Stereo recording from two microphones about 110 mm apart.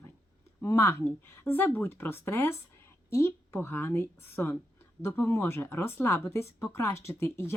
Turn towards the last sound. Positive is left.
turn(degrees=20)  # may be behind; listen again after turning